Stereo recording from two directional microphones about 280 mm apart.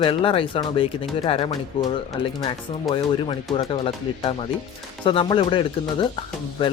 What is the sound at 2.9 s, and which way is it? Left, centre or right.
Speech, centre.